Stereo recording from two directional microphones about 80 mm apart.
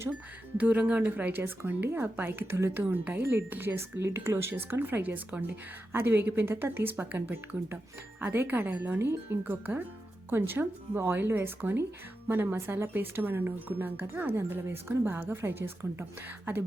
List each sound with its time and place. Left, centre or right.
0.1 s speech: centre